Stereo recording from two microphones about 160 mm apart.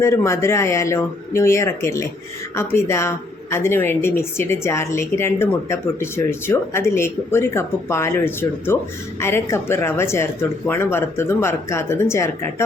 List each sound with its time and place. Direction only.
0.0 s speech: 15° left (ahead or behind)